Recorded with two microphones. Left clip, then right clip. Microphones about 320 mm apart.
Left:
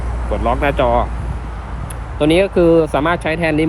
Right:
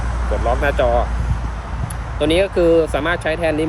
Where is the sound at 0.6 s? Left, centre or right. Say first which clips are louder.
Left 2 dB; centre.